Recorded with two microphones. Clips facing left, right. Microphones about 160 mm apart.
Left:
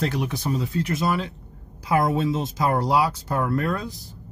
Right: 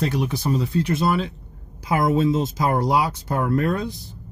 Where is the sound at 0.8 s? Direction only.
30° right (ahead or behind).